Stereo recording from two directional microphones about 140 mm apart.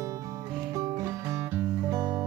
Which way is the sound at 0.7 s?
25° right (ahead or behind).